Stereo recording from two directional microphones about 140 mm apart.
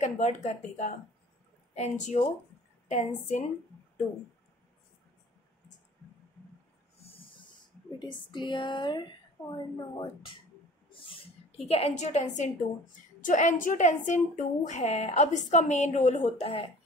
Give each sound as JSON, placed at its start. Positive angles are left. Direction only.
{"t": 0.0, "sound": "a woman's voice", "side_deg": 55}
{"t": 7.0, "sound": "snort", "side_deg": 45}
{"t": 8.0, "sound": "speech", "side_deg": 35}
{"t": 10.9, "sound": "a sound", "side_deg": 40}
{"t": 13.2, "sound": "a woman's voice", "side_deg": 65}